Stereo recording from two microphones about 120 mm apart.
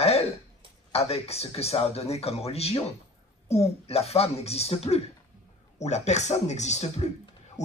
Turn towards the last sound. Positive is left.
turn(degrees=75)  # may be behind; listen again after turning